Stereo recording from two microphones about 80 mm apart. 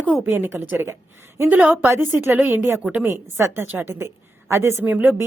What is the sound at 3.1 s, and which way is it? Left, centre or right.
Speech, right.